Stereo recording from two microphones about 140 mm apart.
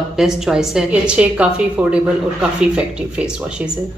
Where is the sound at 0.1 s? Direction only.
5° right (ahead or behind).